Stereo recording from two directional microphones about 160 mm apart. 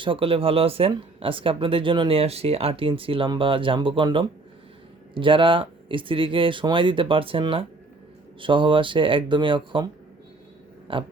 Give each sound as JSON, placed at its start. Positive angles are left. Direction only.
{"t": 0.0, "sound": "speech", "side_deg": -35}
{"t": 10.9, "sound": "speech", "side_deg": -30}